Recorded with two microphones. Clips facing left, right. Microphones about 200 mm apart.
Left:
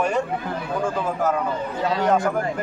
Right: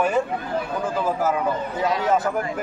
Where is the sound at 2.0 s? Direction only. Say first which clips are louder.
Left 3 dB; 5° right (ahead or behind).